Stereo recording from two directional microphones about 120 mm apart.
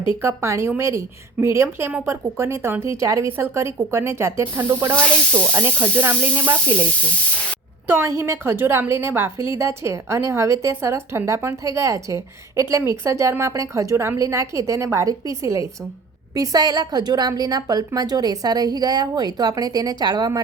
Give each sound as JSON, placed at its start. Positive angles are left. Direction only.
{"t": 0.2, "sound": "a woman's voice", "side_deg": -25}
{"t": 5.5, "sound": "snake", "side_deg": -20}
{"t": 7.9, "sound": "a woman's voice", "side_deg": -20}